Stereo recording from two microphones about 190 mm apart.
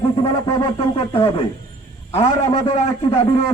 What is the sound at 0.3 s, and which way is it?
A man's voice, 25° left (ahead or behind).